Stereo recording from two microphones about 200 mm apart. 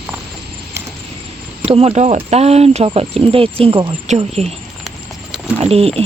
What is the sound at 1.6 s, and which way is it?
Speech, 30° right (ahead or behind).